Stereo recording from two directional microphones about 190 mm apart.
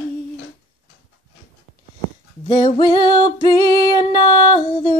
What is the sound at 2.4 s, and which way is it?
Music, 20° left (ahead or behind).